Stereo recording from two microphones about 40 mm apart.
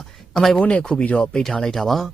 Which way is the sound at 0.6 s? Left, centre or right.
Left.